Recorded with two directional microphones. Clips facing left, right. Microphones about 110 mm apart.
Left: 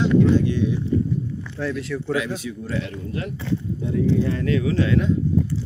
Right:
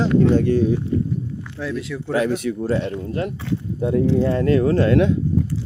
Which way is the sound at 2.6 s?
35° right (ahead or behind).